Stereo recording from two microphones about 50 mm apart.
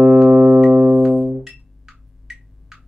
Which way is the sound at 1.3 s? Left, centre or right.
Centre.